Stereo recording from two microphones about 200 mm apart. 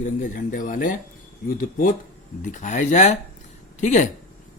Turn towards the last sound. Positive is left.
turn(degrees=40)  # may be behind; listen again after turning